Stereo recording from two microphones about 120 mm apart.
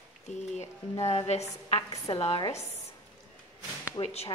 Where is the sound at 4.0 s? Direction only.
60° left (ahead or behind).